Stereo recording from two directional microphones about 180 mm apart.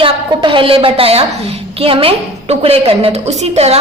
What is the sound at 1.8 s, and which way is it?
A woman's voice, 30° right (ahead or behind).